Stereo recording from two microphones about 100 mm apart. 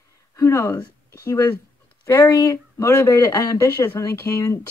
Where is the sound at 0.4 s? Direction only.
30° left (ahead or behind).